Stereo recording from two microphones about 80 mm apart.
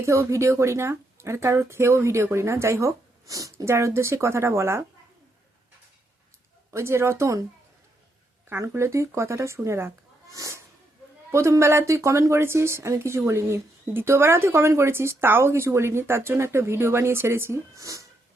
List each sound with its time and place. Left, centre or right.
0.0 s speech: right
6.7 s speech: right
8.4 s speech: right
17.7 s speech: right